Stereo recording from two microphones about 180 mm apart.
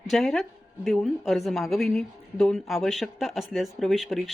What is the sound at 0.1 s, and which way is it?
A woman's voice, centre (ahead or behind).